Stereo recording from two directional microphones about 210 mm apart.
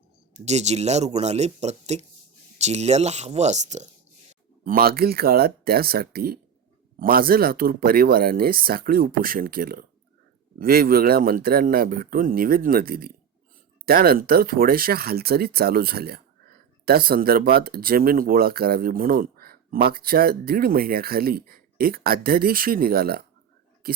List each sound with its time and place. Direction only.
0.3 s speech: 30° right (ahead or behind)
4.6 s speech: 45° right (ahead or behind)